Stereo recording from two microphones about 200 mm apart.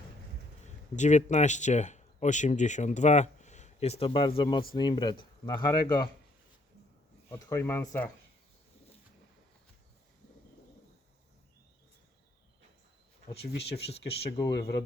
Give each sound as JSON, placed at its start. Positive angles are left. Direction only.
{"t": 0.6, "sound": "speech", "side_deg": 35}
{"t": 7.3, "sound": "speech", "side_deg": 15}
{"t": 13.3, "sound": "speech", "side_deg": 55}